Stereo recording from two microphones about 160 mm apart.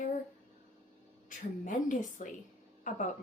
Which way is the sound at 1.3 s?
55° left (ahead or behind).